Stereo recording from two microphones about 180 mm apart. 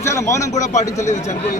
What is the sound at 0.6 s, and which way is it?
Speech, 40° left (ahead or behind).